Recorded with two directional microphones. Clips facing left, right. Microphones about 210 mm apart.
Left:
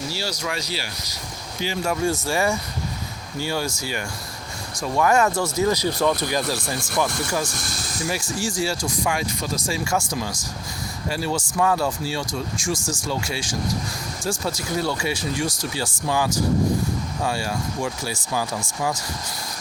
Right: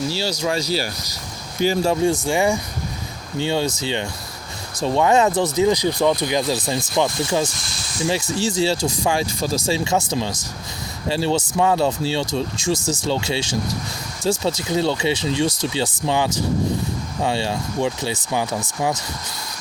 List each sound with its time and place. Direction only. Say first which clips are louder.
0.1 s speech: right 6 dB; 25° right (ahead or behind)
1.8 s speech: right 5 dB; 20° right (ahead or behind)